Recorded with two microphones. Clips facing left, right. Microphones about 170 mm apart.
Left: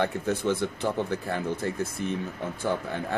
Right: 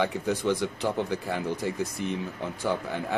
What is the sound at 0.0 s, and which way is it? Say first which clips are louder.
A man's voice: even; 15° right (ahead or behind).